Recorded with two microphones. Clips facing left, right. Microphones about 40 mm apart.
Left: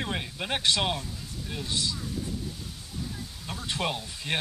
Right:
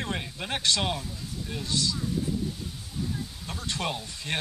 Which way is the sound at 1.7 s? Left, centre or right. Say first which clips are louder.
Right 2 dB; centre.